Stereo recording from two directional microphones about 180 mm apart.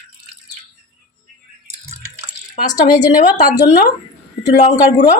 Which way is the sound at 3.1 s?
50° left (ahead or behind).